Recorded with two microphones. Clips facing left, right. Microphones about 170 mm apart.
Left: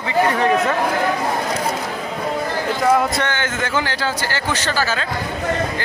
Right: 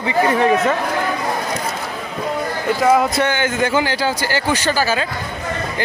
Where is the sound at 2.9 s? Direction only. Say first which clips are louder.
Right 3 dB; 5° right (ahead or behind).